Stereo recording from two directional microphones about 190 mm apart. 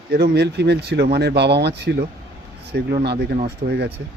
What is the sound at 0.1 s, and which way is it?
Speech, 60° right (ahead or behind).